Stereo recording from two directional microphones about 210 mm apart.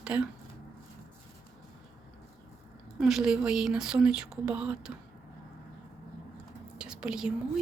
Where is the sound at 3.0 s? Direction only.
Centre (ahead or behind).